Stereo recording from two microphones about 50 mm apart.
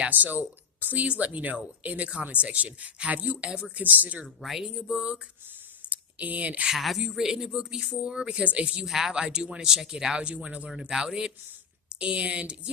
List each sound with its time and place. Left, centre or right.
0.1 s speech: right
4.4 s speech: centre
5.9 s a sound: right
6.7 s speech: centre; by 8.9 s right
8.9 s speech: centre; by 10.7 s right
10.7 s speech: centre